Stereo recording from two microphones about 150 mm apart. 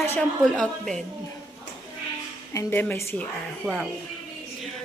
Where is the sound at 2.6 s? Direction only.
15° left (ahead or behind).